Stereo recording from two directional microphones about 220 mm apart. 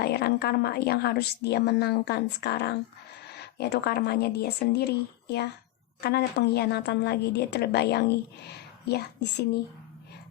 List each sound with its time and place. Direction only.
0.0 s a woman's voice: 45° left (ahead or behind)